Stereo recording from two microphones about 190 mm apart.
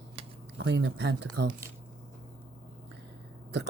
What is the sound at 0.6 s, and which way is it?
Speech, 75° right (ahead or behind).